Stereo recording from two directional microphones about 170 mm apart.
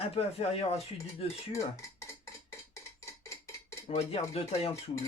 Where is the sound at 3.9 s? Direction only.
35° left (ahead or behind).